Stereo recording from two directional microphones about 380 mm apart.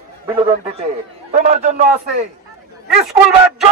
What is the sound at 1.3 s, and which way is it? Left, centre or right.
Speech, right.